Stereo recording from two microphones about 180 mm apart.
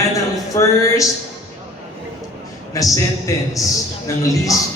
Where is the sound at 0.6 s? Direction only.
15° left (ahead or behind).